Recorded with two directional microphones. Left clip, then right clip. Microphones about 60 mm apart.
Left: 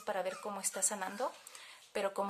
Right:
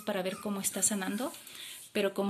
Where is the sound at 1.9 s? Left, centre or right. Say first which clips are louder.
Right 5 dB; left.